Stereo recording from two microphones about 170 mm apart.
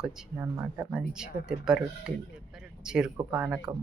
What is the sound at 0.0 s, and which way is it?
Speech, 5° right (ahead or behind).